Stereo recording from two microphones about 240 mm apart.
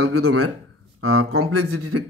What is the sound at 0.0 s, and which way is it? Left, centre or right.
Speech, right.